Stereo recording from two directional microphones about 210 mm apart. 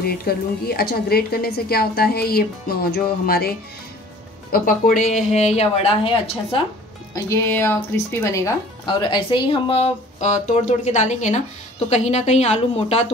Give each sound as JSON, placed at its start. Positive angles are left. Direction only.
{"t": 0.0, "sound": "a woman's voice", "side_deg": 45}
{"t": 7.2, "sound": "speech", "side_deg": 10}